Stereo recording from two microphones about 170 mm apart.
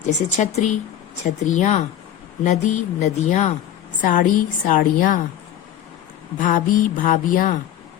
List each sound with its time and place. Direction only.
0.3 s a woman's voice: 40° left (ahead or behind)
6.4 s a woman's voice: 50° left (ahead or behind)